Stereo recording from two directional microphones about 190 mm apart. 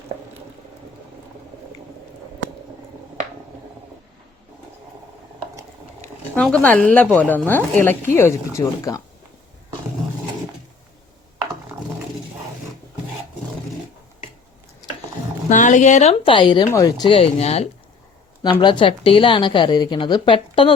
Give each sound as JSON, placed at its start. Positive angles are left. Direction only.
{"t": 6.3, "sound": "speech", "side_deg": 5}
{"t": 15.4, "sound": "a woman's voice", "side_deg": 40}